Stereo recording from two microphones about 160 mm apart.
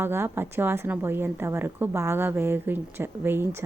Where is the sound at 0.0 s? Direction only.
15° right (ahead or behind).